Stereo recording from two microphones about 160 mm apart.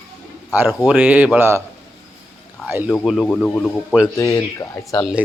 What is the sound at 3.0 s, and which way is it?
Speech, 5° left (ahead or behind).